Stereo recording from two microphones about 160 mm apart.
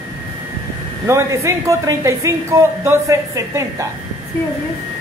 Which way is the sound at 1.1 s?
20° right (ahead or behind).